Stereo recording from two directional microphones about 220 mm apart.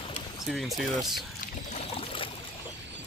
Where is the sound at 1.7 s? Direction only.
30° left (ahead or behind).